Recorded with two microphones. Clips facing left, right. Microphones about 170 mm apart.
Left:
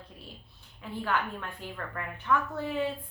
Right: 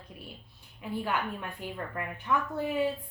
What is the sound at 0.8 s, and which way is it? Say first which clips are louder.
A woman's voice: even; 15° right (ahead or behind).